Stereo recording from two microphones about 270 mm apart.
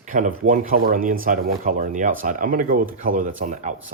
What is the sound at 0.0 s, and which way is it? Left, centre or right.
Speech, right.